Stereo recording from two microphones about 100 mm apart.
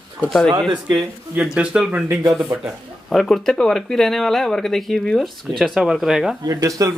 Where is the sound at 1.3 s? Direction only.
10° right (ahead or behind).